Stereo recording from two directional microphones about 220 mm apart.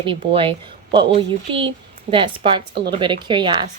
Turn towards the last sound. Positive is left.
turn(degrees=-20)  # may be behind; listen again after turning